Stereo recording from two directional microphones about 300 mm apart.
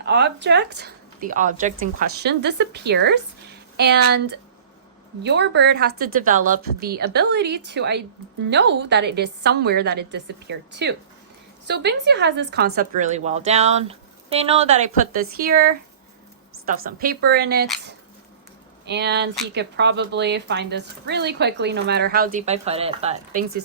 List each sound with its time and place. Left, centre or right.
0.0 s speech: right
18.9 s speech: right